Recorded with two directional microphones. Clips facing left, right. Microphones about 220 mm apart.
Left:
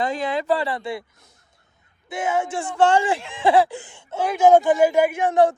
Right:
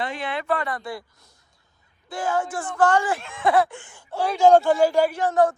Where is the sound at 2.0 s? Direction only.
20° left (ahead or behind).